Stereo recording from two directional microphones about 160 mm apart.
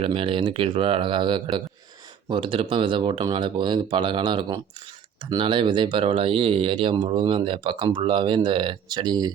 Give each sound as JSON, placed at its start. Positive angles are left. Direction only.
{"t": 0.0, "sound": "speech", "side_deg": -35}